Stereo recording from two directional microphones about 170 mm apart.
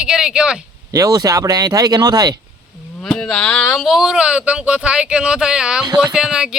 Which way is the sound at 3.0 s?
5° left (ahead or behind).